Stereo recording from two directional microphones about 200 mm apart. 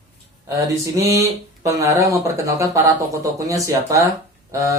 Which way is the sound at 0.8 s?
15° right (ahead or behind).